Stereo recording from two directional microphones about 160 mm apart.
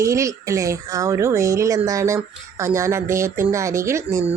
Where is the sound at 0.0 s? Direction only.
20° right (ahead or behind).